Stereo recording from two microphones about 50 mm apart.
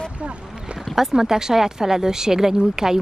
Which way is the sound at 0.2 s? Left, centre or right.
Right.